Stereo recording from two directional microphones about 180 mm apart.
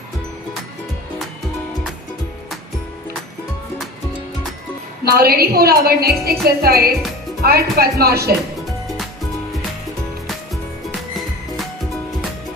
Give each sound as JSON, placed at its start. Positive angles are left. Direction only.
{"t": 5.0, "sound": "a woman's voice", "side_deg": -55}
{"t": 11.1, "sound": "music", "side_deg": 0}